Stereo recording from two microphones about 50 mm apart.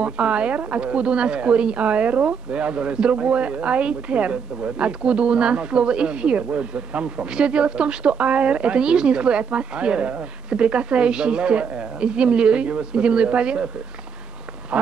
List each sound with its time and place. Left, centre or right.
0.0 s a woman's voice: right